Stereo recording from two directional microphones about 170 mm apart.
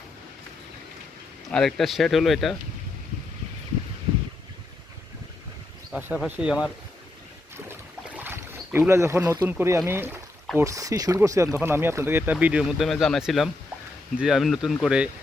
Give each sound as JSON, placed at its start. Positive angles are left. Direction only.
{"t": 1.5, "sound": "speech", "side_deg": 5}
{"t": 5.9, "sound": "speech", "side_deg": -10}
{"t": 7.5, "sound": "boat", "side_deg": -15}
{"t": 10.6, "sound": "speech", "side_deg": -20}